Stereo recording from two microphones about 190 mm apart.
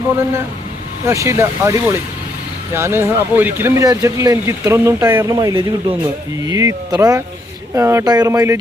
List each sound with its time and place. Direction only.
1.0 s speech: 15° right (ahead or behind)